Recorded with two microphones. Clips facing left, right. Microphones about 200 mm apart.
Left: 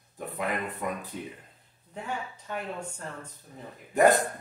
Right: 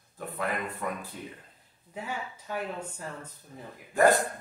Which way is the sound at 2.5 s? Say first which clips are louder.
Right 1 dB; 5° right (ahead or behind).